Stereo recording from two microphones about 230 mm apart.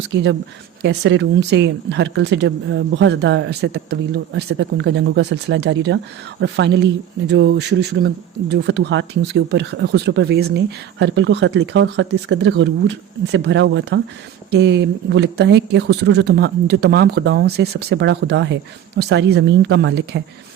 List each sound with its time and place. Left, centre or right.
0.1 s speech: right